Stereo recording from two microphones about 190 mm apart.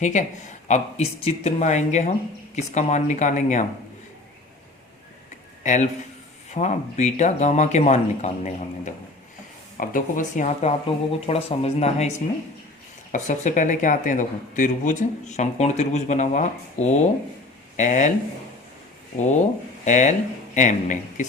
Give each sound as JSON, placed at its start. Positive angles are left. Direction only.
{"t": 0.0, "sound": "speech", "side_deg": 40}
{"t": 5.6, "sound": "speech", "side_deg": 40}
{"t": 19.1, "sound": "speech", "side_deg": 40}